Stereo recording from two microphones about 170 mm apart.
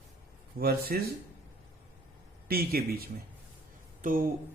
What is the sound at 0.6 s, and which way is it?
Speech, 65° right (ahead or behind).